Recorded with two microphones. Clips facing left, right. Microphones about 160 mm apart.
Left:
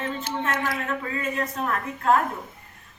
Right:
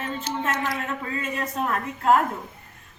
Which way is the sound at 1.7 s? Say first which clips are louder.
Right 2 dB; 20° right (ahead or behind).